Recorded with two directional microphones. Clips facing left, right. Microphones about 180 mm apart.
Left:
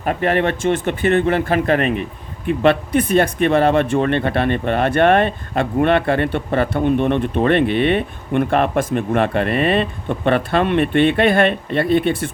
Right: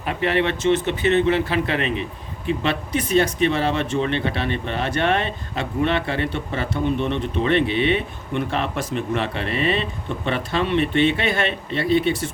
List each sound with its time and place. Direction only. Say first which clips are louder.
0.0 s speech: left 4 dB; 45° left (ahead or behind)